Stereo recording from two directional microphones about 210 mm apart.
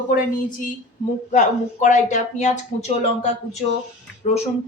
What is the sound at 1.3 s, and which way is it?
A woman's voice, 35° left (ahead or behind).